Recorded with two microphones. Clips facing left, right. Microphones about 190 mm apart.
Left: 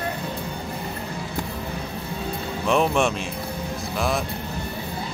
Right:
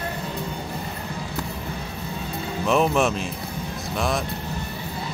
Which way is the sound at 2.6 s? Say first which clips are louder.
Even; centre (ahead or behind).